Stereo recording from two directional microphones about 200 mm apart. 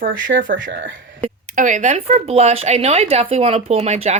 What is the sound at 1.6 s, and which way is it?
Speech, 40° right (ahead or behind).